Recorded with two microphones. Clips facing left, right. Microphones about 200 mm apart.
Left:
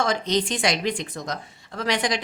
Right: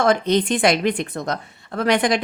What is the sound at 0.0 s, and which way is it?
A woman's voice, 55° right (ahead or behind).